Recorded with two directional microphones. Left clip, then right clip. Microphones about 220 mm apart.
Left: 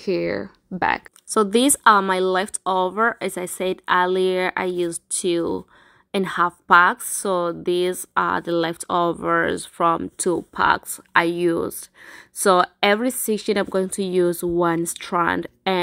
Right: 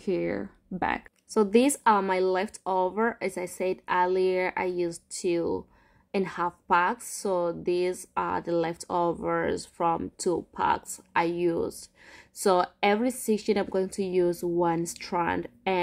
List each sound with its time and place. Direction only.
0.0 s speech: 15° left (ahead or behind)
1.3 s speech: 25° left (ahead or behind)
12.8 s speech: 15° left (ahead or behind)